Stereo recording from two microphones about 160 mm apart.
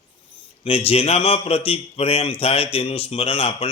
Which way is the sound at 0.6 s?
35° left (ahead or behind).